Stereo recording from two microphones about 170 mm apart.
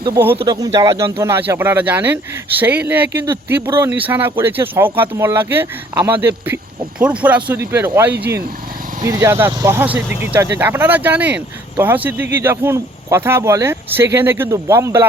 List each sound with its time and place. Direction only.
0.4 s speech: 20° right (ahead or behind)